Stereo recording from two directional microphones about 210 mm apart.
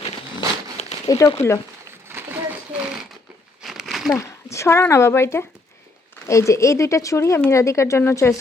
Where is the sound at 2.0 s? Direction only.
10° right (ahead or behind).